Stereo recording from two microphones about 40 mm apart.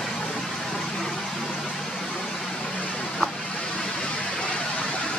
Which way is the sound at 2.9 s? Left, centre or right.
Centre.